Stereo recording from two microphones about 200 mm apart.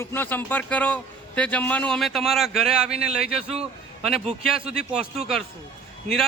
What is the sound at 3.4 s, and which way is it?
Speech, 30° right (ahead or behind).